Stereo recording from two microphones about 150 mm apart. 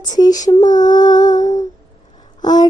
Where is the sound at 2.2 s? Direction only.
30° left (ahead or behind).